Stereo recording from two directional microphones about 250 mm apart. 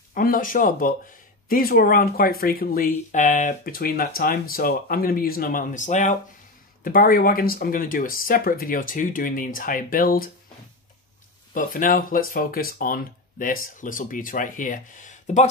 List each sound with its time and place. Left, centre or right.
0.1 s speech: left
11.5 s speech: left